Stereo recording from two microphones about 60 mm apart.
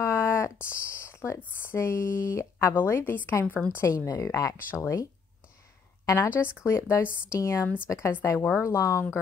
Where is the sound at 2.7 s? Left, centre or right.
Left.